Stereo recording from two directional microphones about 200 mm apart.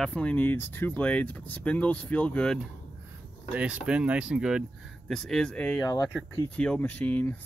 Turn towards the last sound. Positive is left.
turn(degrees=10)  # may be behind; listen again after turning